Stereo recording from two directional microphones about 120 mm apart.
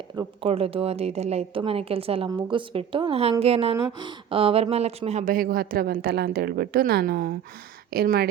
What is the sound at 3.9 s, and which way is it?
A woman's voice, 45° right (ahead or behind).